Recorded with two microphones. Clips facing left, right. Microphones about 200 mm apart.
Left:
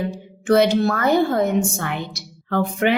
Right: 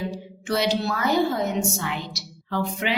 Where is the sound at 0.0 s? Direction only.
55° left (ahead or behind).